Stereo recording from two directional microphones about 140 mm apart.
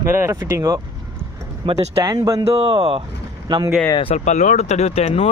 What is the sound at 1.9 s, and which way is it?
Speech, 25° right (ahead or behind).